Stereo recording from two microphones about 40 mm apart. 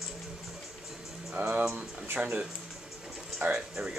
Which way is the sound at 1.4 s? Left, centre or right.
Right.